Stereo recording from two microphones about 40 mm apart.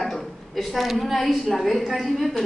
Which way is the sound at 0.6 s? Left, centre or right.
Centre.